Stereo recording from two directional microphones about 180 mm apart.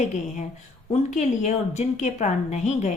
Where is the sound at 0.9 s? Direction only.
40° left (ahead or behind).